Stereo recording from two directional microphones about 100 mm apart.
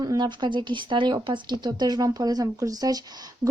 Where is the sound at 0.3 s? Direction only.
50° right (ahead or behind).